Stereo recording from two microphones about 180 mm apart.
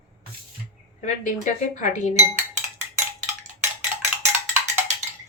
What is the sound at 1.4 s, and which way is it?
Speech, 45° left (ahead or behind).